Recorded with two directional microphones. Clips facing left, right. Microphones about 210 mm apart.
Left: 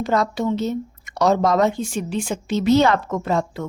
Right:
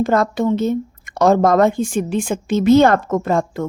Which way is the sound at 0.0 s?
50° right (ahead or behind).